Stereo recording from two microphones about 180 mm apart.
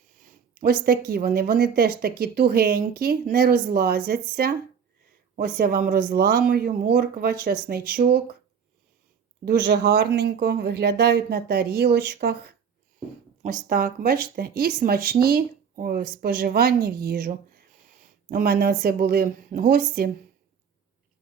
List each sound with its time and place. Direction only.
0.2 s speech: 50° right (ahead or behind)
9.4 s speech: 60° right (ahead or behind)